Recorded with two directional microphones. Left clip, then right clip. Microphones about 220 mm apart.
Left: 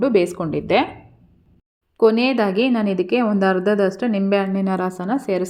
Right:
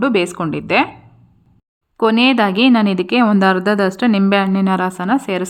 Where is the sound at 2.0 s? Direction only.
15° right (ahead or behind).